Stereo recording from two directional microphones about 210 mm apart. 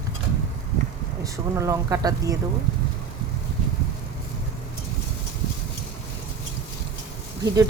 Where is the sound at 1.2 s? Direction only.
15° right (ahead or behind).